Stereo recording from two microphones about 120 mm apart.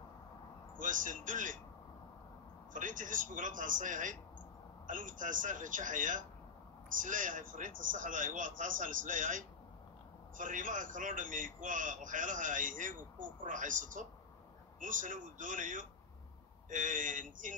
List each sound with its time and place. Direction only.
0.7 s a man's voice: 90° right
2.7 s a man's voice: 90° right